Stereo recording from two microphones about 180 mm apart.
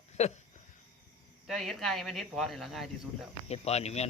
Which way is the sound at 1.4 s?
Centre (ahead or behind).